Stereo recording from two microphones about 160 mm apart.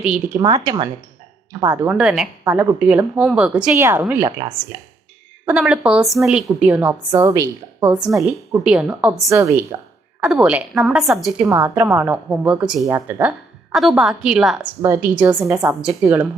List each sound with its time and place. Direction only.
0.3 s a woman's voice: 25° right (ahead or behind)
1.6 s a woman's voice: 15° right (ahead or behind)
2.4 s a woman's voice: 15° right (ahead or behind)
3.8 s a woman's voice: 15° right (ahead or behind)
4.3 s a woman's voice: 25° right (ahead or behind)
5.5 s a woman's voice: 5° right (ahead or behind)
8.3 s a woman's voice: 5° right (ahead or behind)
9.3 s a woman's voice: 15° right (ahead or behind)
10.2 s a woman's voice: 5° right (ahead or behind)
11.4 s a woman's voice: 15° right (ahead or behind)
13.7 s a woman's voice: centre (ahead or behind)
14.8 s a woman's voice: 15° right (ahead or behind)